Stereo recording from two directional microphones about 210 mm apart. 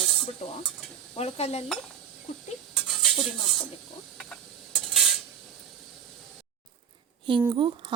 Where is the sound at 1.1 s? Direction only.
30° left (ahead or behind).